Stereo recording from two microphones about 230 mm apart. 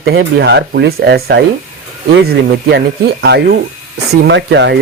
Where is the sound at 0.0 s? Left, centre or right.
Right.